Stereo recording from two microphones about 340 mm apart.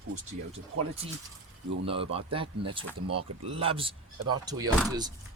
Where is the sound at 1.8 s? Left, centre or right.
Centre.